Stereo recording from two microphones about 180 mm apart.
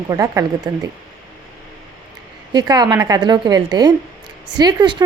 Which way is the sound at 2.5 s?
20° right (ahead or behind).